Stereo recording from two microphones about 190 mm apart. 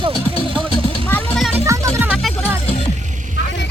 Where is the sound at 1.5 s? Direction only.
15° right (ahead or behind).